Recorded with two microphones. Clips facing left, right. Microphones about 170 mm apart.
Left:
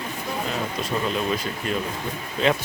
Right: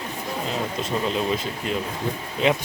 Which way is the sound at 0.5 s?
25° right (ahead or behind).